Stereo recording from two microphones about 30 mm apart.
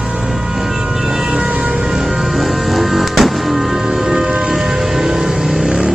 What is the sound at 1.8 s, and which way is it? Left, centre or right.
Music, centre.